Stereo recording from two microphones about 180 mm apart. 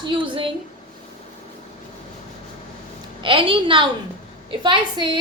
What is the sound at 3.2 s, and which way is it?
A woman's voice, 30° right (ahead or behind).